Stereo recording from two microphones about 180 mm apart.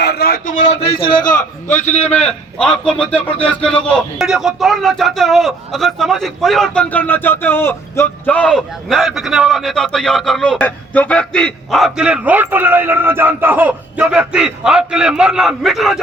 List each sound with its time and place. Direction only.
0.0 s a man's voice: 65° left (ahead or behind); by 0.7 s 45° left (ahead or behind)
0.8 s a man's voice: 30° left (ahead or behind)
1.3 s a man's voice: 45° left (ahead or behind)
2.6 s speech: 5° left (ahead or behind)